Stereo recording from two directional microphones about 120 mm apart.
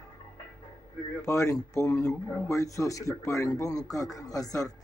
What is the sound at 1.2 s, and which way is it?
Speech, 25° left (ahead or behind).